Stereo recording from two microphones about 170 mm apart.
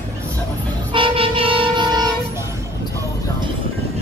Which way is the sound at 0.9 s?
30° right (ahead or behind).